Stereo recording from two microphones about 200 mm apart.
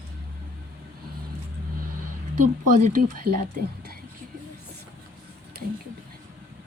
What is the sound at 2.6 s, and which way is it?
Speech, 40° right (ahead or behind).